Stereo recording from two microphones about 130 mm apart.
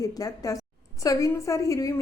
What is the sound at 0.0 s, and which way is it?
A woman's voice, 25° left (ahead or behind).